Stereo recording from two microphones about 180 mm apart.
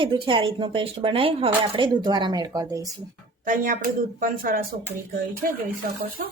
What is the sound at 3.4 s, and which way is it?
Speech, 50° right (ahead or behind).